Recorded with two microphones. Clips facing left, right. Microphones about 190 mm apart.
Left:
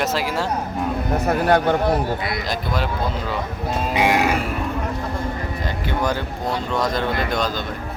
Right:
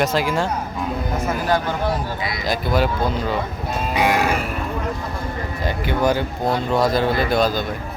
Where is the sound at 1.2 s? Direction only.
65° left (ahead or behind).